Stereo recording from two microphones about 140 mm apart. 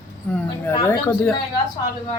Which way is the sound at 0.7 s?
20° left (ahead or behind).